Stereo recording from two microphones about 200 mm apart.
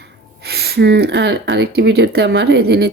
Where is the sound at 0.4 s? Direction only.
55° right (ahead or behind).